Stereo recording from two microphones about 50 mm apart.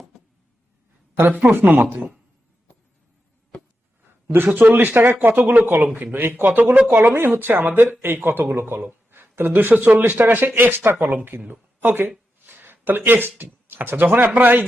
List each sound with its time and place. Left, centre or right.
1.3 s speech: right
4.3 s speech: right
7.4 s speech: right
8.8 s a sound: right
9.1 s speech: right
12.5 s a sound: right
13.1 s speech: right